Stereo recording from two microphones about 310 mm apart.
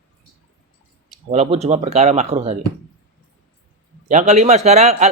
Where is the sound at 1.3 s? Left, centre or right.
Right.